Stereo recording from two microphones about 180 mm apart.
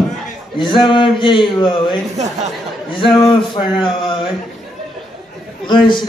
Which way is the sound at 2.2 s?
40° right (ahead or behind).